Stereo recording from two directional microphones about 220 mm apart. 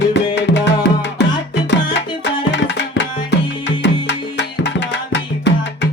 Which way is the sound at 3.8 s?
55° left (ahead or behind).